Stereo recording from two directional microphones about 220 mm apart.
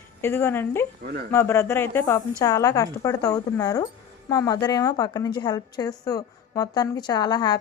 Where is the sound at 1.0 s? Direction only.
45° right (ahead or behind).